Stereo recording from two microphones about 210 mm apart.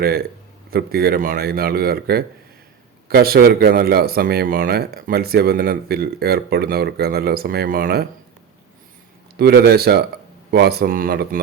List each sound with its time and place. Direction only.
0.0 s a man's voice: 50° right (ahead or behind)
9.4 s a man's voice: 50° right (ahead or behind)